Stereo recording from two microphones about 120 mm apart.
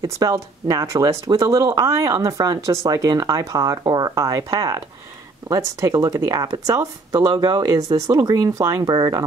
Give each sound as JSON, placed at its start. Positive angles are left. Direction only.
{"t": 0.0, "sound": "speech", "side_deg": -30}